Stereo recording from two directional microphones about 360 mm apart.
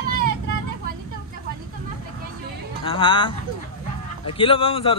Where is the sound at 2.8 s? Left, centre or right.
Centre.